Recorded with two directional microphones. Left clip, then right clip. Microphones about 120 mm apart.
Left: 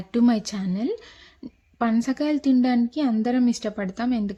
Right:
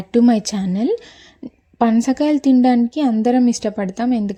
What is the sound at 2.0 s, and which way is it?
A woman's voice, 35° right (ahead or behind).